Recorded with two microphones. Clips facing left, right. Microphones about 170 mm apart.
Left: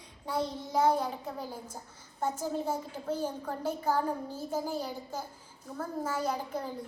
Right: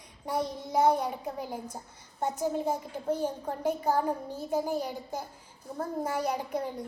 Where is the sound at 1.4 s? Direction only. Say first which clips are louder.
Right 3 dB; 10° right (ahead or behind).